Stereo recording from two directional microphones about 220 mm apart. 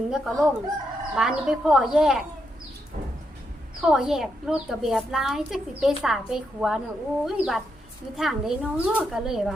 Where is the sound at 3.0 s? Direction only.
35° right (ahead or behind).